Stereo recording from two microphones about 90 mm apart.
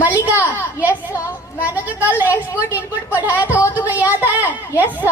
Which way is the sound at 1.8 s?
20° right (ahead or behind).